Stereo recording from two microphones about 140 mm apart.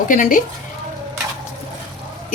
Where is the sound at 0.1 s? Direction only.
70° left (ahead or behind).